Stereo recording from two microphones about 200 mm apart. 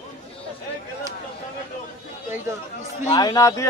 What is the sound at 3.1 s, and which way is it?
Speech, 20° left (ahead or behind).